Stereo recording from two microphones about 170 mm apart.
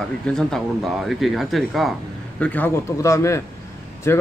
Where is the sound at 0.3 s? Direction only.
5° left (ahead or behind).